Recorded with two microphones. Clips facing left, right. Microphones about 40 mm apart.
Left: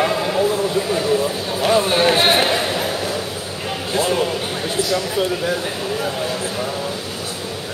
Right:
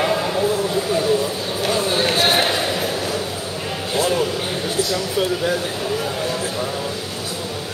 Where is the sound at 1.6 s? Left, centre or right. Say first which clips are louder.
Left 5 dB; left.